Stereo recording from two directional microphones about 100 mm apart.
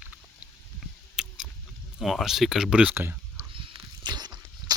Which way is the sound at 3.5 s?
60° right (ahead or behind).